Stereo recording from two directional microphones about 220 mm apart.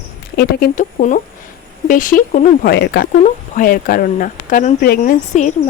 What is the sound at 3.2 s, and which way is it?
Speech, 40° left (ahead or behind).